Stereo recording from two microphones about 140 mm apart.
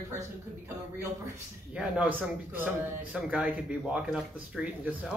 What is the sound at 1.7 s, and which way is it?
Speech, 5° right (ahead or behind).